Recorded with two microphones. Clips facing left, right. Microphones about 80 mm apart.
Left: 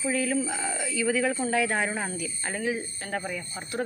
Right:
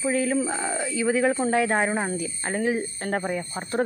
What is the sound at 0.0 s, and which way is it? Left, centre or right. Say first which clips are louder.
Speech: right 3 dB; right.